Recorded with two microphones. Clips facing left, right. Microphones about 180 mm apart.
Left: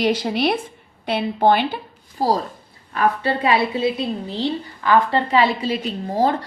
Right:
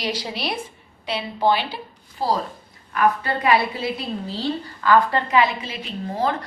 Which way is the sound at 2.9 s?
30° left (ahead or behind).